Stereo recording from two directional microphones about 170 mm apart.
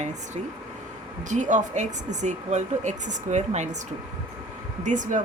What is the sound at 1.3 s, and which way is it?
Speech, 45° right (ahead or behind).